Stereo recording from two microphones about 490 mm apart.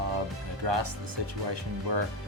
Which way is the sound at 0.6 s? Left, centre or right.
Right.